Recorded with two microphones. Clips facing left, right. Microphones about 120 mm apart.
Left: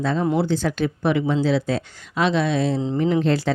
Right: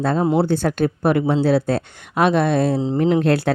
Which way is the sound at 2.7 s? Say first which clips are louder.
Right 3 dB; 35° right (ahead or behind).